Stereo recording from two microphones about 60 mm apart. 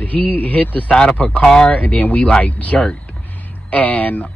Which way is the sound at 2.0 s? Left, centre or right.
Left.